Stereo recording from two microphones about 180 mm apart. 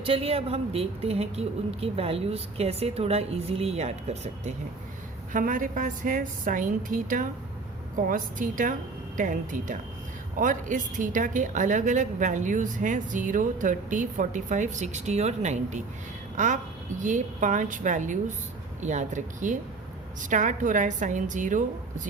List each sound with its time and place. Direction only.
0.0 s a woman's voice: 30° right (ahead or behind)
5.3 s a woman's voice: 50° right (ahead or behind)